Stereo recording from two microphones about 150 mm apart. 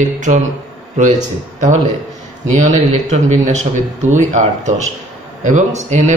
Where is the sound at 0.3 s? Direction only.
50° right (ahead or behind).